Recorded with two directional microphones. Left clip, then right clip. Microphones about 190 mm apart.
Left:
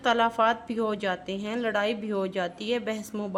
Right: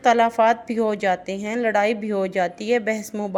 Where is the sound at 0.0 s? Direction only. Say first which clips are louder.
Right 6 dB; 15° right (ahead or behind).